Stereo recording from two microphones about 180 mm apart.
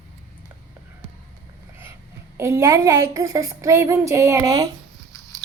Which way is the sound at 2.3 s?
15° right (ahead or behind).